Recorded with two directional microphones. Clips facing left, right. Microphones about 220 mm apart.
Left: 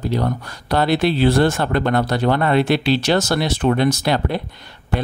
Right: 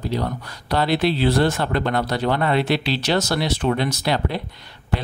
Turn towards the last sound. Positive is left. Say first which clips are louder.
# left 3 dB
turn(degrees=50)  # may be behind; listen again after turning